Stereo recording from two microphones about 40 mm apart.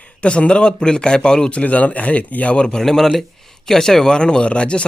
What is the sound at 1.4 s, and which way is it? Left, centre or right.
A man's voice, left.